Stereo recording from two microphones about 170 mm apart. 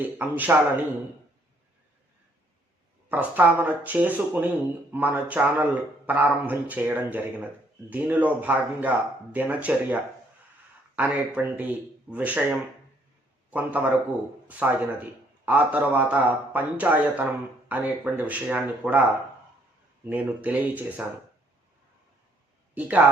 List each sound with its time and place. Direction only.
0.0 s speech: 10° right (ahead or behind)
3.1 s speech: 10° right (ahead or behind)
20.1 s speech: 10° right (ahead or behind)
22.7 s speech: 10° right (ahead or behind)